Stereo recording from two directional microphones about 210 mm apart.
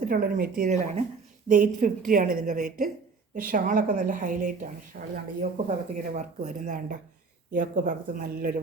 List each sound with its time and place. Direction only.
0.1 s a woman's voice: 45° right (ahead or behind)